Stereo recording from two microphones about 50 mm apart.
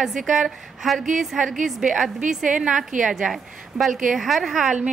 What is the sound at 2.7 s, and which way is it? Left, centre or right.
A woman's voice, centre.